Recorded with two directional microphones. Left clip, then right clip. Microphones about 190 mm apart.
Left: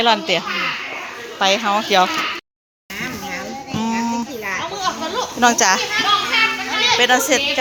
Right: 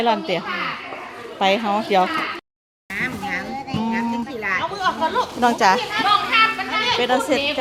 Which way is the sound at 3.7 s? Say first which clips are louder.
Left 4 dB; centre (ahead or behind).